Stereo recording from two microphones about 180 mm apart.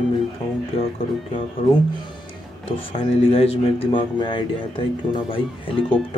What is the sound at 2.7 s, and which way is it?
A man's voice, 30° left (ahead or behind).